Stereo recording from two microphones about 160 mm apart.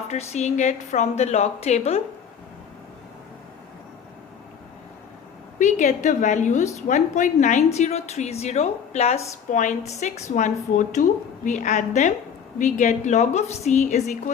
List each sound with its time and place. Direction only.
0.1 s a woman's voice: 45° left (ahead or behind)
5.5 s a woman's voice: 50° left (ahead or behind)